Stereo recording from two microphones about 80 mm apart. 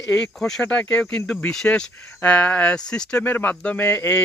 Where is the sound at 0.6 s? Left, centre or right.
Centre.